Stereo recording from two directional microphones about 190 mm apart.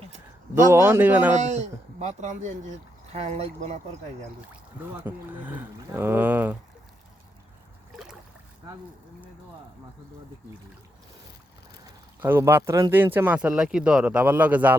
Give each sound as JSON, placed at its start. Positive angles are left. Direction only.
{"t": 0.7, "sound": "speech", "side_deg": -10}
{"t": 1.4, "sound": "speech", "side_deg": -40}
{"t": 4.9, "sound": "speech", "side_deg": -10}
{"t": 12.2, "sound": "speech", "side_deg": -10}